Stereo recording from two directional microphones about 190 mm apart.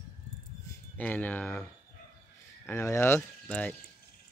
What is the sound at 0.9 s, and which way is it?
Speech, 10° left (ahead or behind).